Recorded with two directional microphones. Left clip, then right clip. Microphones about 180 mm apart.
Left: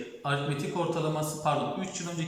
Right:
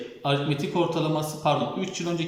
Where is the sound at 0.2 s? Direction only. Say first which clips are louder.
Right 5 dB; 15° right (ahead or behind).